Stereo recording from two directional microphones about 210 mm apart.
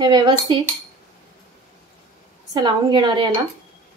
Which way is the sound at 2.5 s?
20° right (ahead or behind).